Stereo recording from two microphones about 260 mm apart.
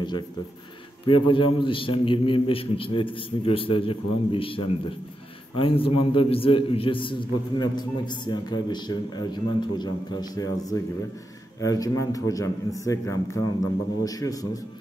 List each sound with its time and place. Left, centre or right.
1.3 s a man's voice: centre